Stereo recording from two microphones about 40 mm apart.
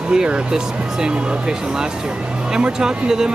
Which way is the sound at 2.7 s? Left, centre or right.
Centre.